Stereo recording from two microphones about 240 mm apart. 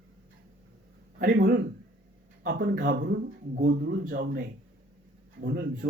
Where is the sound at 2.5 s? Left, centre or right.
Right.